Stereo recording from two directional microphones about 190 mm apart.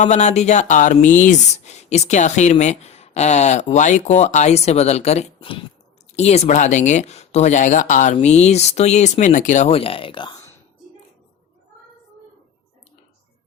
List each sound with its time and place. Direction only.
0.0 s speech: 35° left (ahead or behind)